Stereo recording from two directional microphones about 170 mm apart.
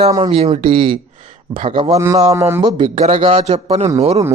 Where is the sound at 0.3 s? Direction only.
40° right (ahead or behind).